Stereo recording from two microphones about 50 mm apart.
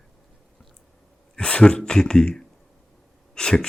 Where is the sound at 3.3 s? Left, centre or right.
Centre.